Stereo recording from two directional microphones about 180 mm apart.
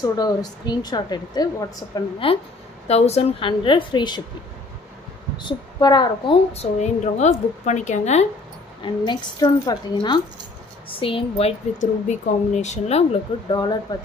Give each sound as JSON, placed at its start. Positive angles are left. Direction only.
{"t": 0.0, "sound": "a woman's voice", "side_deg": 20}
{"t": 2.9, "sound": "a woman's voice", "side_deg": 35}
{"t": 5.4, "sound": "a woman's voice", "side_deg": 25}
{"t": 8.8, "sound": "a woman's voice", "side_deg": 25}
{"t": 13.5, "sound": "a woman's voice", "side_deg": 25}